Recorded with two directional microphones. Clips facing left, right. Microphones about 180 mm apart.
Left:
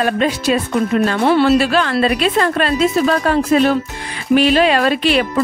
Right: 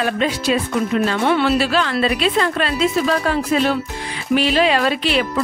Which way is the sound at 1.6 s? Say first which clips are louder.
Left 3 dB; 50° left (ahead or behind).